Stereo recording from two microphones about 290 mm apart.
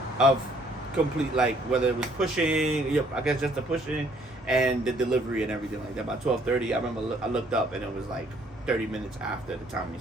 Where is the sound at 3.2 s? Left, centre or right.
Centre.